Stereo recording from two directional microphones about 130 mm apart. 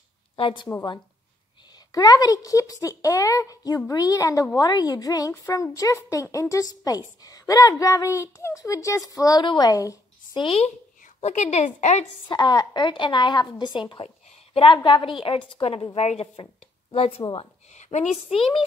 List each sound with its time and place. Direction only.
0.4 s a woman's voice: 40° left (ahead or behind)
1.9 s a woman's voice: 30° left (ahead or behind)
10.3 s speech: 45° left (ahead or behind)
11.1 s a woman's voice: 60° left (ahead or behind)
12.3 s a woman's voice: 35° left (ahead or behind)
17.7 s a woman's voice: 60° left (ahead or behind)